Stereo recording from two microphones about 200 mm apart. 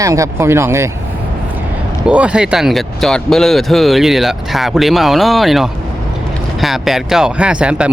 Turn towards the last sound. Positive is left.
turn(degrees=-5)  # may be behind; listen again after turning